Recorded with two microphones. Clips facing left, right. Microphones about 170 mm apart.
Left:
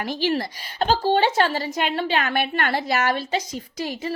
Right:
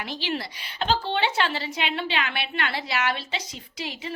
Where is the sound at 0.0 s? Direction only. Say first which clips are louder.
Left 7 dB; 45° left (ahead or behind).